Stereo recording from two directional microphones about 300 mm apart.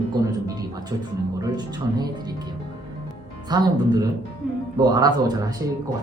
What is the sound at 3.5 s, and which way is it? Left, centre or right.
Speech, centre.